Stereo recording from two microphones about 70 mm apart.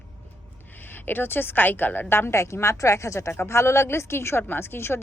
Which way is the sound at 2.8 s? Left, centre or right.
Left.